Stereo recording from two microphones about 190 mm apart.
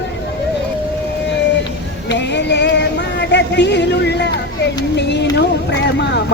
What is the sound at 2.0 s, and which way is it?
Music, 65° left (ahead or behind).